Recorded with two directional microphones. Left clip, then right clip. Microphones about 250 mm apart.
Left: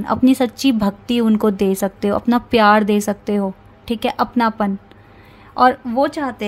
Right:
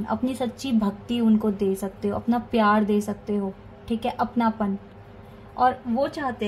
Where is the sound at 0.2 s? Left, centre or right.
Left.